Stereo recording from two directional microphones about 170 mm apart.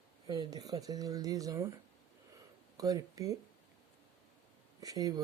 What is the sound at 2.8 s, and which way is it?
Speech, 20° right (ahead or behind).